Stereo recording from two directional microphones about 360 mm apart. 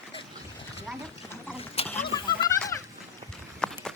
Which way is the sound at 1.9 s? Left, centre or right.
Centre.